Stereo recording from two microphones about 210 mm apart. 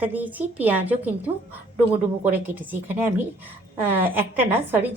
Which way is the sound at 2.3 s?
10° right (ahead or behind).